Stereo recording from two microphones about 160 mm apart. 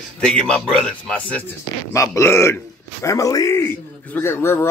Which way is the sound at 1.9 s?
20° left (ahead or behind).